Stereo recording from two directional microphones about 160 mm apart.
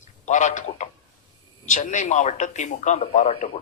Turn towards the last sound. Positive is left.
turn(degrees=45)  # may be behind; listen again after turning